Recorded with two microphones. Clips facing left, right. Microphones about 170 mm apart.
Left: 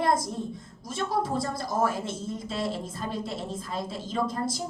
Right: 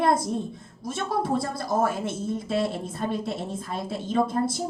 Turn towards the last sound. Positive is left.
turn(degrees=-60)  # may be behind; listen again after turning